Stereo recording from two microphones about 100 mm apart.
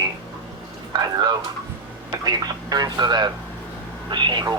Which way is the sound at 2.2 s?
40° right (ahead or behind).